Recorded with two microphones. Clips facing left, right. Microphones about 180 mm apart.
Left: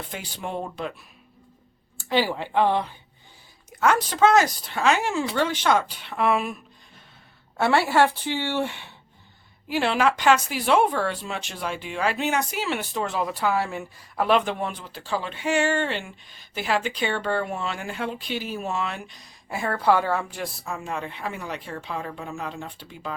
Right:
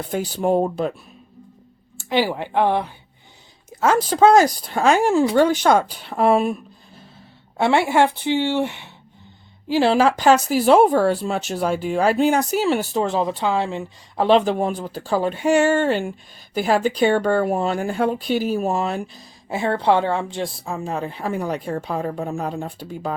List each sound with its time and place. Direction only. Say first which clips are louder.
0.1 s speech: right 16 dB; 45° right (ahead or behind)
2.0 s a woman's voice: right 3 dB; 15° right (ahead or behind)
3.7 s speech: right 4 dB; 30° right (ahead or behind)
7.5 s a woman's voice: right 3 dB; 20° right (ahead or behind)
9.6 s speech: right 6 dB; 30° right (ahead or behind)
19.5 s speech: right 3 dB; 25° right (ahead or behind)